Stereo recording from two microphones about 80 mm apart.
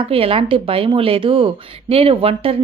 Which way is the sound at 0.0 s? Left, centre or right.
Right.